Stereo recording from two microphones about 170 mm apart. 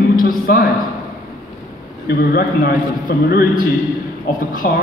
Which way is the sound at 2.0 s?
65° left (ahead or behind).